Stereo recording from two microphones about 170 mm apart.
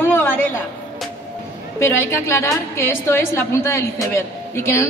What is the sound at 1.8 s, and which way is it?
A woman's voice, 15° left (ahead or behind).